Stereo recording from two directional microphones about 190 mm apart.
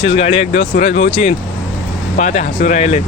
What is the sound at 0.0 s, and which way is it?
Speech, 35° left (ahead or behind).